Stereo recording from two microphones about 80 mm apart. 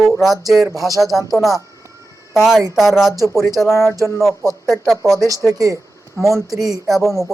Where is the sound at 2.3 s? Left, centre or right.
Centre.